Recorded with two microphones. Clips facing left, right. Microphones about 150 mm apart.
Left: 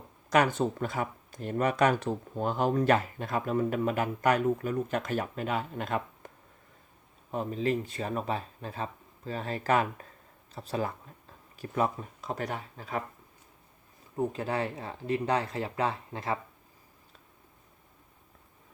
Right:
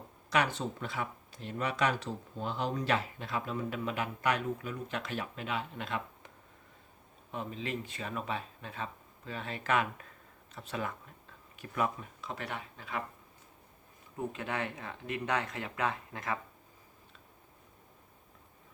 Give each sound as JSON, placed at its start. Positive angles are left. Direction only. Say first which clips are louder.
{"t": 0.3, "sound": "speech", "louder": "left 6 dB", "side_deg": 45}
{"t": 14.2, "sound": "speech", "louder": "left 6 dB", "side_deg": 35}